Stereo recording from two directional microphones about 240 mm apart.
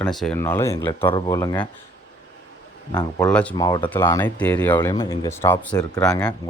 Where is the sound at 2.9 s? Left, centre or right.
Centre.